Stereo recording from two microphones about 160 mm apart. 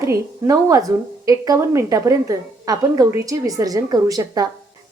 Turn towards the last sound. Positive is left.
turn(degrees=-25)  # may be behind; listen again after turning